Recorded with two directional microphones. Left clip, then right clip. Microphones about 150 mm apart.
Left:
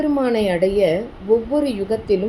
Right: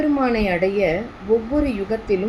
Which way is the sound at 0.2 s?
30° left (ahead or behind).